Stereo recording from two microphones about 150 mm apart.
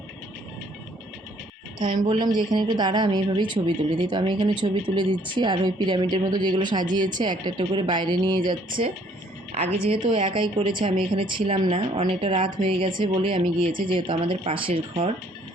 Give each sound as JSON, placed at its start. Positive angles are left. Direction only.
{"t": 1.8, "sound": "a woman's voice", "side_deg": -60}
{"t": 2.0, "sound": "a woman's voice", "side_deg": -30}
{"t": 9.6, "sound": "a woman's voice", "side_deg": -45}